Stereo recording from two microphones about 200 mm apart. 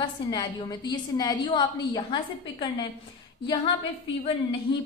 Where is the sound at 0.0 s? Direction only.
20° left (ahead or behind).